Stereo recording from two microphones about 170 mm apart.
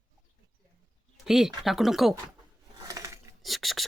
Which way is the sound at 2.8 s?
20° right (ahead or behind).